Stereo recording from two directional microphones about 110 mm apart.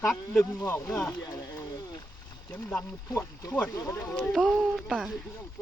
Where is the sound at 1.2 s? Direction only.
35° left (ahead or behind).